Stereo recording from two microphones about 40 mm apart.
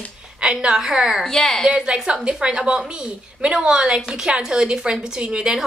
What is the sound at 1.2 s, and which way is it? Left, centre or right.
Speech, centre.